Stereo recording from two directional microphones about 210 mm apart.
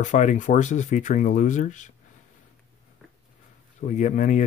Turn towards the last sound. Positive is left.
turn(degrees=35)  # may be behind; listen again after turning